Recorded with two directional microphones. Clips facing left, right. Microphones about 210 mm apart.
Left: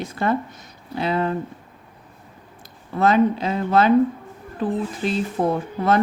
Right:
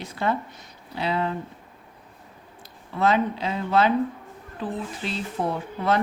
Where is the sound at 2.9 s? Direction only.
45° left (ahead or behind).